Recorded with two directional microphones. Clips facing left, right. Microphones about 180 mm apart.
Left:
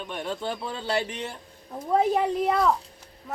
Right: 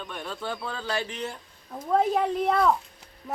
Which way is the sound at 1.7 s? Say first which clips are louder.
Left 1 dB; 10° left (ahead or behind).